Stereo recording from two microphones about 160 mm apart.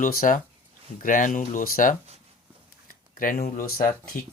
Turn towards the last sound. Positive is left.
turn(degrees=65)  # may be behind; listen again after turning